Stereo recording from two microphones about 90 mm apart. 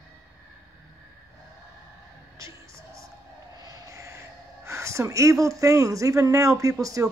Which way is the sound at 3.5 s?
45° right (ahead or behind).